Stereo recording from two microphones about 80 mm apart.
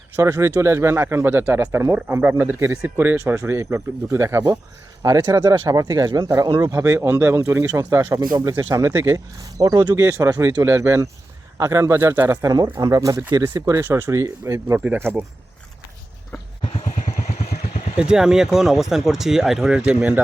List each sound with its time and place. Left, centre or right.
0.2 s speech: right
5.5 s speech: right
6.8 s speech: right
8.9 s speech: right
9.1 s speech: right
9.9 s speech: right
10.2 s speech: right
10.7 s speech: right
12.4 s speech: right
18.0 s speech: centre